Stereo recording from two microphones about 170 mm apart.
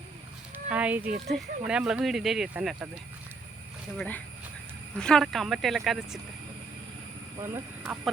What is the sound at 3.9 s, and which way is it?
Speech, 10° left (ahead or behind).